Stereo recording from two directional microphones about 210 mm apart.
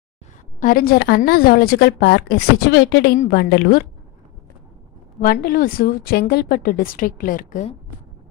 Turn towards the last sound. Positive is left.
turn(degrees=35)  # may be behind; listen again after turning